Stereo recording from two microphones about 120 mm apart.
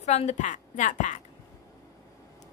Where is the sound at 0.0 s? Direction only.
65° left (ahead or behind); by 1.2 s 90° left.